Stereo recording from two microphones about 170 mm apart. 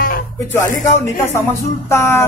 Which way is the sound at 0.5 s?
15° left (ahead or behind).